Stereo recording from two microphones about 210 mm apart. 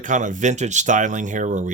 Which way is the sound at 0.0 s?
35° right (ahead or behind).